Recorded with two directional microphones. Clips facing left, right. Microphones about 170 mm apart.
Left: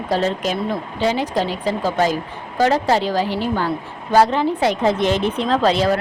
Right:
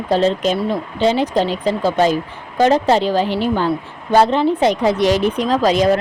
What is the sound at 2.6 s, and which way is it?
A woman's voice, 20° right (ahead or behind).